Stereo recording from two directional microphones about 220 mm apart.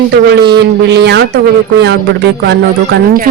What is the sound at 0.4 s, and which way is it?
Speech, 50° right (ahead or behind).